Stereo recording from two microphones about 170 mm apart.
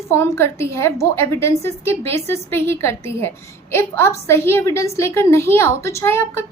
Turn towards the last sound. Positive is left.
turn(degrees=15)  # may be behind; listen again after turning